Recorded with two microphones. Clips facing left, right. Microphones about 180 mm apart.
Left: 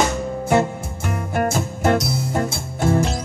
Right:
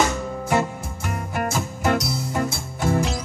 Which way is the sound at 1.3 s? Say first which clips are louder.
Left 5 dB; 50° left (ahead or behind).